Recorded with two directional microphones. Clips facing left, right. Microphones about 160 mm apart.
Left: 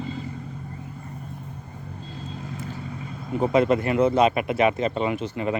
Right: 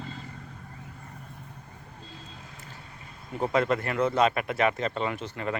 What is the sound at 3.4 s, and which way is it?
Speech, 15° left (ahead or behind).